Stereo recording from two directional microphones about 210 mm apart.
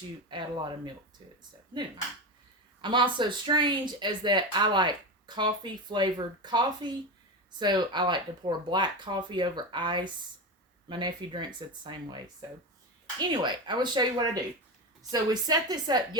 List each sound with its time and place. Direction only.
0.3 s speech: 20° right (ahead or behind)
2.8 s speech: 25° right (ahead or behind)
13.1 s speech: 20° right (ahead or behind)